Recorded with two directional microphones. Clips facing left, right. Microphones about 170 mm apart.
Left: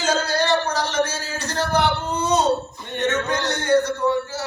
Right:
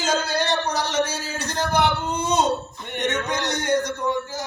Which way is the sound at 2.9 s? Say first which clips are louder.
Left 3 dB; 15° right (ahead or behind).